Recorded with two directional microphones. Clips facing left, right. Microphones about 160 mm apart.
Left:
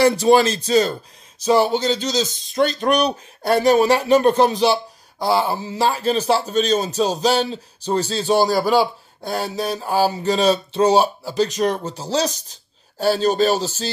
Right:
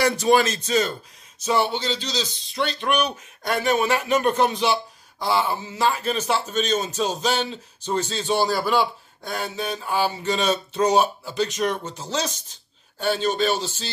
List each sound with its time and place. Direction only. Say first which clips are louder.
0.0 s a man's voice: left 5 dB; 30° left (ahead or behind)